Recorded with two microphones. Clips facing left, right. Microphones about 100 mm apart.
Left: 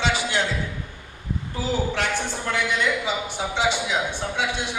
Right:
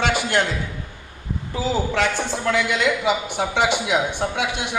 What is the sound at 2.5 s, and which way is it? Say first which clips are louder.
A man's voice: right 1 dB; 90° right.